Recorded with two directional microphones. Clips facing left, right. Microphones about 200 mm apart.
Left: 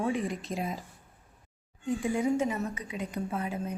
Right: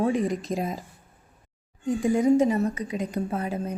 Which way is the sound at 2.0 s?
40° right (ahead or behind).